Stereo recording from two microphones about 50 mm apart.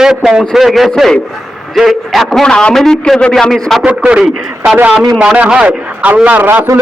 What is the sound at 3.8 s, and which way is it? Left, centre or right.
A man's voice, right.